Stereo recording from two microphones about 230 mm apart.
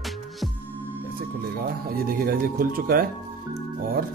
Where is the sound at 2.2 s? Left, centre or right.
Right.